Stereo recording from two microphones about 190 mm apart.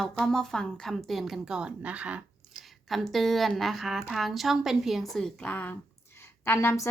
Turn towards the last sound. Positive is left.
turn(degrees=15)  # may be behind; listen again after turning